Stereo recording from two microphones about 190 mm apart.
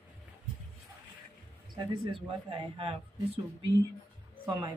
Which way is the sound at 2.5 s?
30° right (ahead or behind).